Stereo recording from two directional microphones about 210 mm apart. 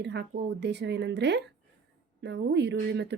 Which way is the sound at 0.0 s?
55° right (ahead or behind).